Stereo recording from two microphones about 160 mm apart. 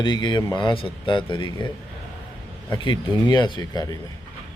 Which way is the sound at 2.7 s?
30° left (ahead or behind).